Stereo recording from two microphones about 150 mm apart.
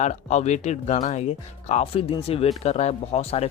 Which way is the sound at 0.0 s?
50° left (ahead or behind).